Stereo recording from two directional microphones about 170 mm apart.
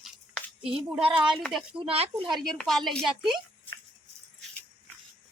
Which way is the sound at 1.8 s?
35° right (ahead or behind).